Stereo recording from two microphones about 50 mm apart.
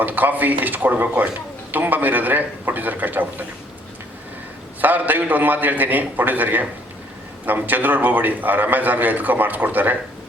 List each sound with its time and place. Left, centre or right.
0.0 s a man's voice: right
4.8 s a man's voice: right